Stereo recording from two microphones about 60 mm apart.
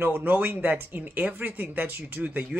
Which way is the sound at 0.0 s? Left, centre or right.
Right.